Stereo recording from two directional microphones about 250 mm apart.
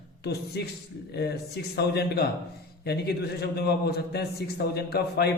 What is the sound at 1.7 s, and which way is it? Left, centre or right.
Speech, left.